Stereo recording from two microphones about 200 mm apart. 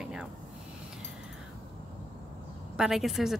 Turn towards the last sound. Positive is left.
turn(degrees=0)  # may be behind; listen again after turning